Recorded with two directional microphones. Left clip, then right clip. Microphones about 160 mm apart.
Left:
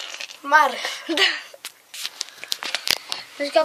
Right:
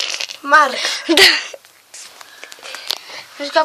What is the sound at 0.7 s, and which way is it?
Speech, 40° right (ahead or behind).